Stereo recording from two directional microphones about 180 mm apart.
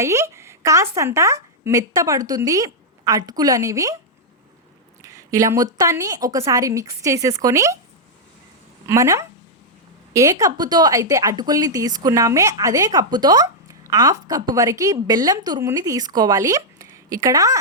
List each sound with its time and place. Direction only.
0.0 s a woman's voice: 15° right (ahead or behind)
5.0 s a woman's voice: 15° right (ahead or behind)
8.9 s a woman's voice: 15° right (ahead or behind)